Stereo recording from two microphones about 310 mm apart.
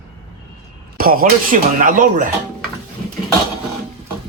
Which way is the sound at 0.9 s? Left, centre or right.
Right.